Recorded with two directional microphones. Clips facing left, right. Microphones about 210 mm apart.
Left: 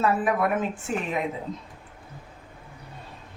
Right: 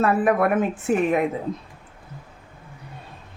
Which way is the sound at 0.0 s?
60° right (ahead or behind).